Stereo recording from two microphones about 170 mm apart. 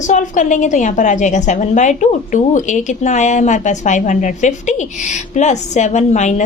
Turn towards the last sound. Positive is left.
turn(degrees=45)  # may be behind; listen again after turning